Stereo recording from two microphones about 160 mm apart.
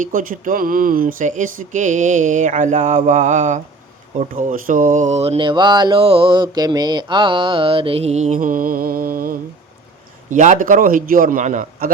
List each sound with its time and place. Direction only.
0.0 s speech: 55° right (ahead or behind)
10.2 s a man's voice: 50° right (ahead or behind)